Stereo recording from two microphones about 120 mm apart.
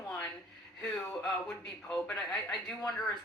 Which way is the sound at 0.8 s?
10° left (ahead or behind).